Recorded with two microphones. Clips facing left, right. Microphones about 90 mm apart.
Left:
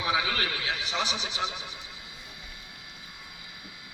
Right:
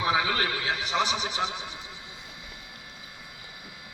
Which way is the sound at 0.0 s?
35° right (ahead or behind).